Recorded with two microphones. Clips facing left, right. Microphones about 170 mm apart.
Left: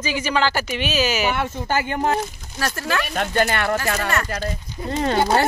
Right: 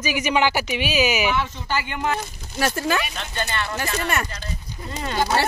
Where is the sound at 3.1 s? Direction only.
60° left (ahead or behind).